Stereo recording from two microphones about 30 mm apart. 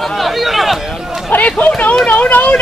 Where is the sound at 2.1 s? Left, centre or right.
Left.